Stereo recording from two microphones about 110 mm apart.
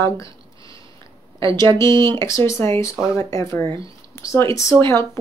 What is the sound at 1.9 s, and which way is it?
Speech, 40° right (ahead or behind).